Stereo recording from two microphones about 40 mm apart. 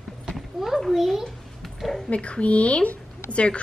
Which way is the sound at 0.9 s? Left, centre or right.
Centre.